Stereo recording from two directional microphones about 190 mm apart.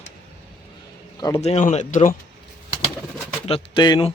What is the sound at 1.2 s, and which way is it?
Speech, 20° left (ahead or behind).